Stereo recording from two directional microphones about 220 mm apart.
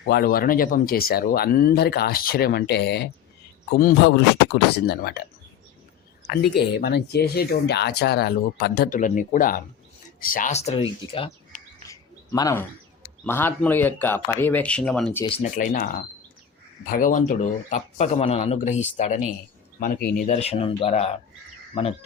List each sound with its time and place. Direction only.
0.1 s speech: 45° left (ahead or behind)
6.5 s speech: 50° left (ahead or behind); by 15.2 s 5° left (ahead or behind)
15.4 s speech: 35° left (ahead or behind)